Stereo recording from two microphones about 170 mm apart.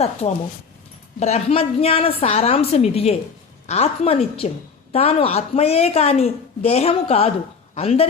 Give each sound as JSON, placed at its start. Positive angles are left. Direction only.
{"t": 0.0, "sound": "a woman's voice", "side_deg": 40}